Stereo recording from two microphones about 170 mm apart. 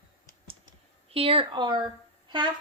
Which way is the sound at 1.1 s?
35° right (ahead or behind).